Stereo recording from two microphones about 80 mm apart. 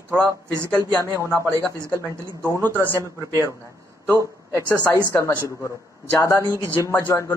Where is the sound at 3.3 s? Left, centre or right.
Right.